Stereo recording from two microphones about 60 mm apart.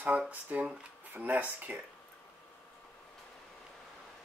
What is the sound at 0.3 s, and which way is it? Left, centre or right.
Speech, right.